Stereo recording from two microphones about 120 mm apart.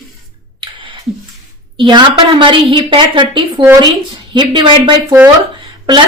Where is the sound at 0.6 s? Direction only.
45° right (ahead or behind).